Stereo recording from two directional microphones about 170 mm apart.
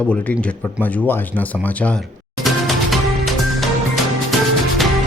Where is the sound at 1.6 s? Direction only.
10° left (ahead or behind).